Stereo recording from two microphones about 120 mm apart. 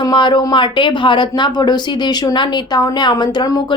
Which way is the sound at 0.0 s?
40° left (ahead or behind).